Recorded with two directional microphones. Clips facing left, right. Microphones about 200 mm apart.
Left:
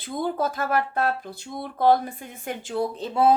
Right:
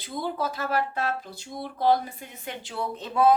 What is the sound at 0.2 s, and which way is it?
Speech, 50° left (ahead or behind).